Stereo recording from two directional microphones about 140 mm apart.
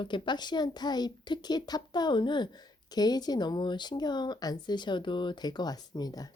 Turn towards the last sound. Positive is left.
turn(degrees=25)  # may be behind; listen again after turning